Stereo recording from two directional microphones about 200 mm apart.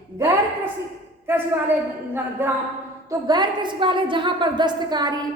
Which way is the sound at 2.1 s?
10° right (ahead or behind).